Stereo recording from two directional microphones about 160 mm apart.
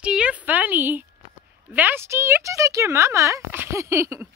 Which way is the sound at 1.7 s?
10° right (ahead or behind).